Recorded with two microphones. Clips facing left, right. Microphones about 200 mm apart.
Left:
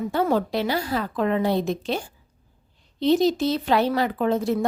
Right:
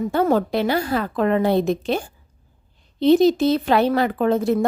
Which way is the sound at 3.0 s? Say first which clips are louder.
Right 5 dB; 55° right (ahead or behind).